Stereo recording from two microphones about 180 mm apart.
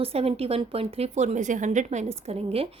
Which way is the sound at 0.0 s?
35° right (ahead or behind).